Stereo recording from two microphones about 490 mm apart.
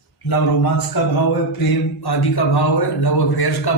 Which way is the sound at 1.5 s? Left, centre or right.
Left.